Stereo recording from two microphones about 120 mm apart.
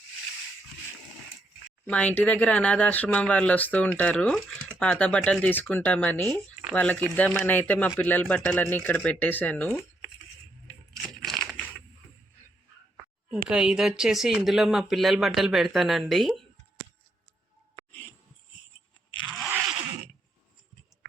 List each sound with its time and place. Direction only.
1.9 s speech: 15° left (ahead or behind)
10.9 s a sound: centre (ahead or behind)
13.3 s speech: 5° right (ahead or behind)